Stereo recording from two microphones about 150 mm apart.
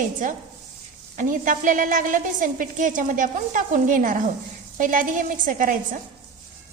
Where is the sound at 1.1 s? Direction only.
60° right (ahead or behind).